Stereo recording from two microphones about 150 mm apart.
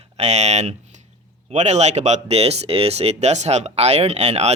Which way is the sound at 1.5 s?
50° right (ahead or behind).